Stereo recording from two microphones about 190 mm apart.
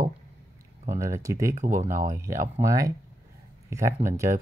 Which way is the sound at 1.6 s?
40° right (ahead or behind).